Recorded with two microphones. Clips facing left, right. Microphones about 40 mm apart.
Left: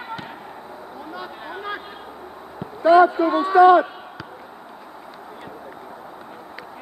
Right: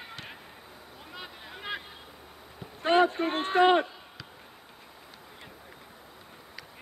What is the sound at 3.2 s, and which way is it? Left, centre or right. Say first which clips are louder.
Speech: left 10 dB; right.